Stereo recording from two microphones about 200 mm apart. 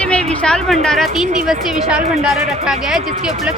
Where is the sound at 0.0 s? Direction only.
5° left (ahead or behind).